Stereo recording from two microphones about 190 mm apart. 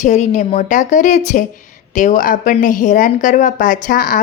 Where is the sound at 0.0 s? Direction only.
40° left (ahead or behind).